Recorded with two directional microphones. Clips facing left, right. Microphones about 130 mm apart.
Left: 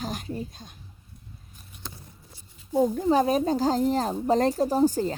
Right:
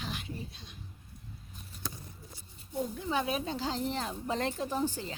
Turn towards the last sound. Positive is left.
turn(degrees=40)  # may be behind; listen again after turning